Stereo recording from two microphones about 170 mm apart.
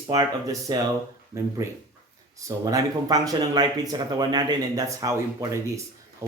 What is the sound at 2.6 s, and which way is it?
Speech, 20° right (ahead or behind).